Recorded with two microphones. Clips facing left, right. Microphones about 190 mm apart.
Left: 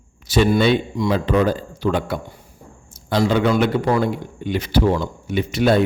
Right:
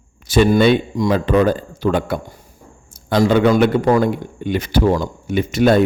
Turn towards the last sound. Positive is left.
turn(degrees=-45)  # may be behind; listen again after turning